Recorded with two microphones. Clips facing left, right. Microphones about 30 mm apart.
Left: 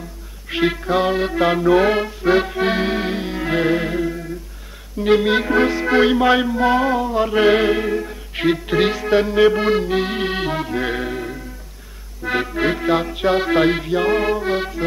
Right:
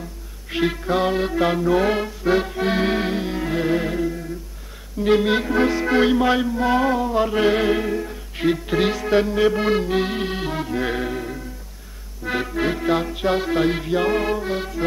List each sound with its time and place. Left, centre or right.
0.5 s music: centre
2.8 s accordion: centre
3.4 s music: left
3.7 s music: centre
6.7 s music: centre
7.4 s music: centre
9.7 s music: centre
10.3 s accordion: left
12.2 s music: centre
13.5 s music: left
13.7 s music: centre